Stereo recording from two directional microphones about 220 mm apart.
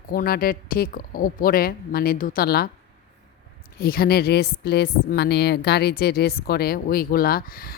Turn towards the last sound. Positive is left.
turn(degrees=40)  # may be behind; listen again after turning